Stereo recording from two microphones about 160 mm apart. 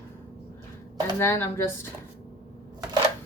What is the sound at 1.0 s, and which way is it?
Speech, 15° left (ahead or behind).